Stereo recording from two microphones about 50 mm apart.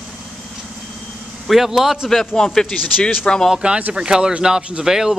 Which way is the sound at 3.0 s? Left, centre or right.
Left.